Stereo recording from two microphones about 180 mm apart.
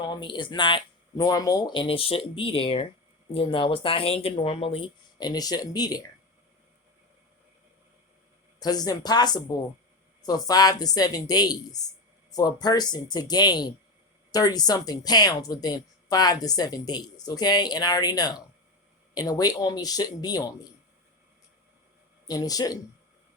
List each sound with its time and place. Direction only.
0.0 s a woman's voice: 25° left (ahead or behind)
8.5 s a woman's voice: 20° left (ahead or behind)
22.3 s a woman's voice: 20° left (ahead or behind)